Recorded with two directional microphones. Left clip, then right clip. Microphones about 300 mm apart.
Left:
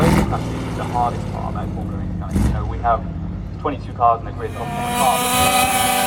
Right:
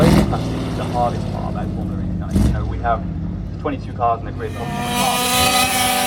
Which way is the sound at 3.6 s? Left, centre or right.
Centre.